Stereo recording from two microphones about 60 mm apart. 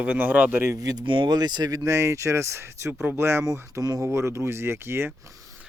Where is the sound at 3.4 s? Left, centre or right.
Right.